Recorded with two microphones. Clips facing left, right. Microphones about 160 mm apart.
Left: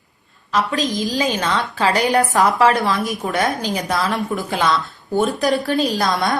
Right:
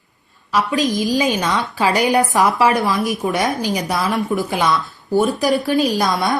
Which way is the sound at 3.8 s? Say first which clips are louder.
Even; 20° right (ahead or behind).